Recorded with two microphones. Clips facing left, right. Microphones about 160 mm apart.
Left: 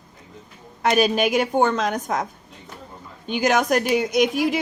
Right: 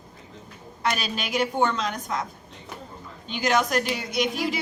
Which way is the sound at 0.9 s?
50° left (ahead or behind).